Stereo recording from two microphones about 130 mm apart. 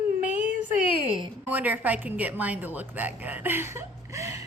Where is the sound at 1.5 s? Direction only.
15° right (ahead or behind).